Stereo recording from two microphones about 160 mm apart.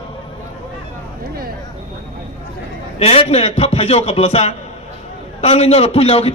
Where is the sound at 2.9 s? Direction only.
40° left (ahead or behind).